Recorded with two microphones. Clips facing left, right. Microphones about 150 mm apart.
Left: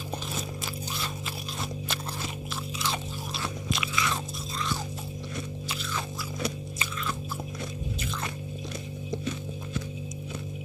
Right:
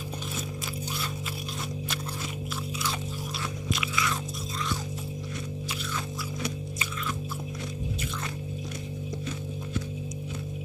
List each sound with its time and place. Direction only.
3.7 s biting: 30° left (ahead or behind)